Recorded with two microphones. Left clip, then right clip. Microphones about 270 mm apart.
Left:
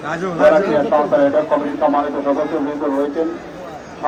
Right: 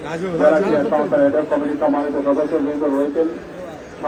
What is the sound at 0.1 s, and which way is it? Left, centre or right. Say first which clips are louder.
Speech: left 3 dB; left.